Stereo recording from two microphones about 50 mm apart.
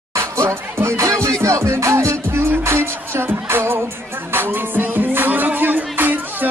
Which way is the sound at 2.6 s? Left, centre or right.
Right.